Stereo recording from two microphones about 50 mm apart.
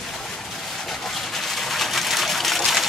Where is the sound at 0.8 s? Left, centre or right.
Centre.